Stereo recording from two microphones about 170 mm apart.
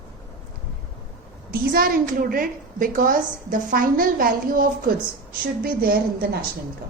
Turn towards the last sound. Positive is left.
turn(degrees=-60)  # may be behind; listen again after turning